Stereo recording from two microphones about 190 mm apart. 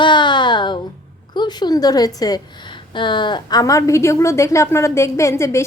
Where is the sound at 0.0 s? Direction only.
25° left (ahead or behind).